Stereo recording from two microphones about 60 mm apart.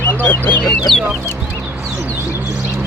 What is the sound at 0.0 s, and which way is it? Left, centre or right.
Speech, left.